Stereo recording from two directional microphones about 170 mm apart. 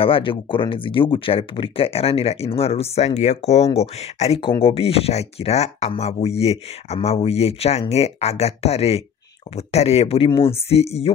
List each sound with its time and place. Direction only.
0.0 s speech: 30° left (ahead or behind)